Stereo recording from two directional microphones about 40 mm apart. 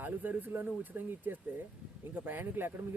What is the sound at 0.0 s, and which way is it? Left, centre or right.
Speech, right.